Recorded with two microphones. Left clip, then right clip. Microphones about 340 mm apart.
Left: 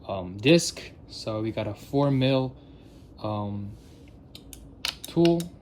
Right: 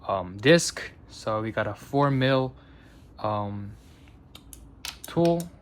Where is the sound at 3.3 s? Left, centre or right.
Centre.